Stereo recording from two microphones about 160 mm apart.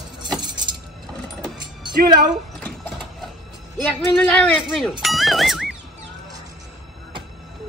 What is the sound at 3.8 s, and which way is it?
Speech, 5° left (ahead or behind).